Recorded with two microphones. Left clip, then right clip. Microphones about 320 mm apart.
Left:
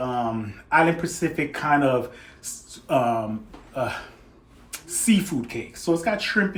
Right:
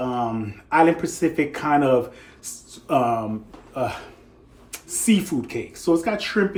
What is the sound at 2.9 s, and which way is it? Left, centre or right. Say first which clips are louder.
Speech: right 1 dB; centre.